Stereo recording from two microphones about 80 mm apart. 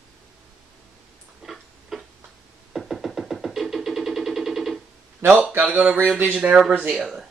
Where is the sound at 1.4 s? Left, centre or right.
Centre.